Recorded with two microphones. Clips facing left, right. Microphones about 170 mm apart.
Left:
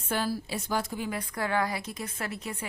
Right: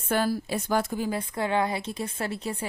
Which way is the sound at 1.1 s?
25° right (ahead or behind).